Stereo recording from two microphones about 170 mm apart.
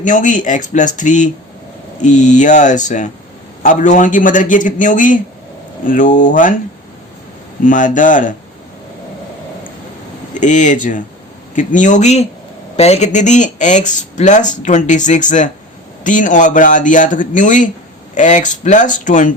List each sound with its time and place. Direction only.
0.0 s speech: 50° left (ahead or behind)
7.6 s speech: 50° left (ahead or behind)
10.3 s speech: 45° left (ahead or behind)